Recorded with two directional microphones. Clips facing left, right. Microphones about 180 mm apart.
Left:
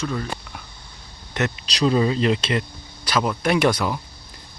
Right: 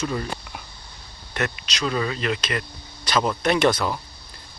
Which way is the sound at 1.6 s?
30° left (ahead or behind).